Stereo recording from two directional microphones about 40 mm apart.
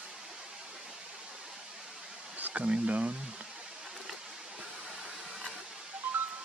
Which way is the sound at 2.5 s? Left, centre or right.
Right.